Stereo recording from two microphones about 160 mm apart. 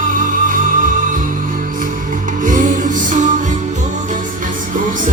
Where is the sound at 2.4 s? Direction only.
55° right (ahead or behind).